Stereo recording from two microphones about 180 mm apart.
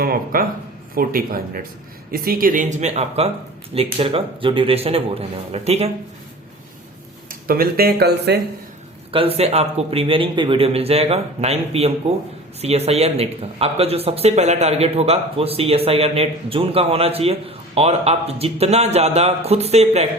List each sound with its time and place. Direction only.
0.0 s speech: 55° right (ahead or behind); by 5.9 s 35° right (ahead or behind)
7.3 s speech: 55° right (ahead or behind)
9.1 s speech: 30° right (ahead or behind)